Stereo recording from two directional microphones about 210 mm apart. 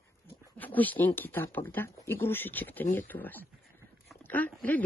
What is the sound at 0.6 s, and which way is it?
Speech, 10° left (ahead or behind).